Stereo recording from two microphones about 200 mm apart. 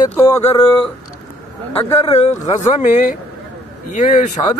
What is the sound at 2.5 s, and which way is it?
Speech, 35° left (ahead or behind).